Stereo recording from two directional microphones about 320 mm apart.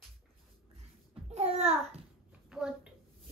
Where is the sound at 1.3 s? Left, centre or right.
Centre.